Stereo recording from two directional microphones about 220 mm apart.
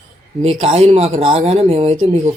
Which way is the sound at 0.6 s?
25° right (ahead or behind).